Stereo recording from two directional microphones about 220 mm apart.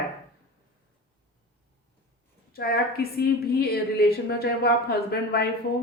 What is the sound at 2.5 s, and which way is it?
A woman's voice, 45° left (ahead or behind).